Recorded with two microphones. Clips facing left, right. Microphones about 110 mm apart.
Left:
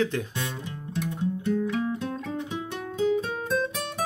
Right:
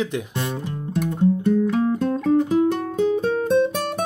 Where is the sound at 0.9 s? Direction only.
50° right (ahead or behind).